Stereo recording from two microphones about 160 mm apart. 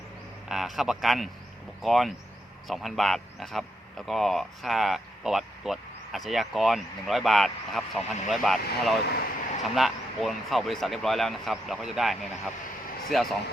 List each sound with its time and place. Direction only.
0.4 s speech: centre (ahead or behind)
9.0 s speech: 75° left (ahead or behind)
9.7 s speech: centre (ahead or behind)